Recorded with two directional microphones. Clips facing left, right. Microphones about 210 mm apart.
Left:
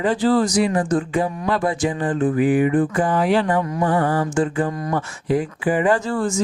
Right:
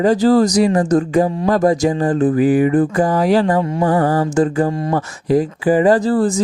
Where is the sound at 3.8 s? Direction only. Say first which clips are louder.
Right 4 dB; 40° right (ahead or behind).